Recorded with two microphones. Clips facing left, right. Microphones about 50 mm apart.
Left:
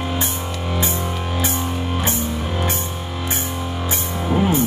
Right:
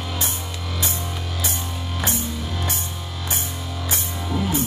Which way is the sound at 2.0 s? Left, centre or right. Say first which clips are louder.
Left 4 dB; left.